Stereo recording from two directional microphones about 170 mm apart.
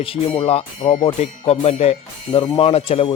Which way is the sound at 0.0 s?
35° left (ahead or behind).